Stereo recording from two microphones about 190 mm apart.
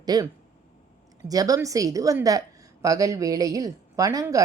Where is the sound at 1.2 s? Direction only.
20° right (ahead or behind).